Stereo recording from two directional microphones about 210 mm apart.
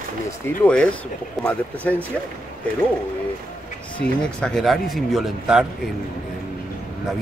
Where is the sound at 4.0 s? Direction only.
5° left (ahead or behind).